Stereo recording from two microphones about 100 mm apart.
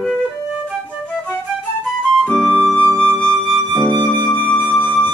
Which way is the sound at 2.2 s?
10° left (ahead or behind).